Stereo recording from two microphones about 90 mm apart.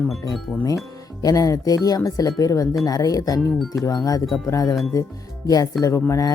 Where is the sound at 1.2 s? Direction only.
45° left (ahead or behind).